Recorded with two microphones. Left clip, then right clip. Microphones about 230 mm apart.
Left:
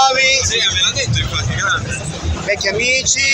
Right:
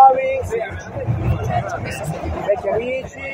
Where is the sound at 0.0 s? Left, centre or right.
Left.